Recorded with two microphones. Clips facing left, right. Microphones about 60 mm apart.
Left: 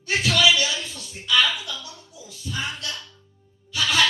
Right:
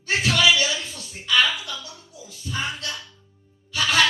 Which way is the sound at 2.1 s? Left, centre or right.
Right.